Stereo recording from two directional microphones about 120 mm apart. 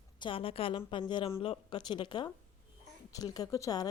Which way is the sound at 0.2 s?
45° left (ahead or behind).